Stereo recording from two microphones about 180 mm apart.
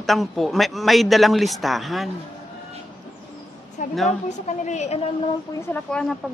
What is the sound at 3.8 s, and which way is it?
A woman's voice, 45° left (ahead or behind).